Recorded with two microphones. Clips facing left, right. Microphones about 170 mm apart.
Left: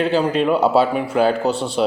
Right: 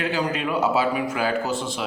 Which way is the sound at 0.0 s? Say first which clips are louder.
Left 7 dB; 30° left (ahead or behind).